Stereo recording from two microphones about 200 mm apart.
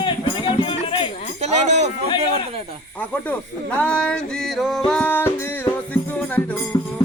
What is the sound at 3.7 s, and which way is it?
Music, 5° left (ahead or behind).